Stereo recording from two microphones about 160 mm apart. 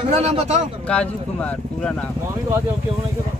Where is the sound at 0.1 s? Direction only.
40° right (ahead or behind).